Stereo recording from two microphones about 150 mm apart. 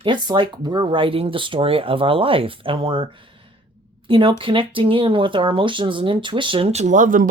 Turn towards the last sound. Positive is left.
turn(degrees=-60)  # may be behind; listen again after turning